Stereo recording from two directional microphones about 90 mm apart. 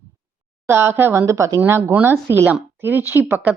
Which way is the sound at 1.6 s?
25° right (ahead or behind).